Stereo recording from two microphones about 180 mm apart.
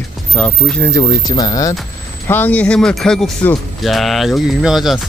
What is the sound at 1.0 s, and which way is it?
Speech, 20° left (ahead or behind).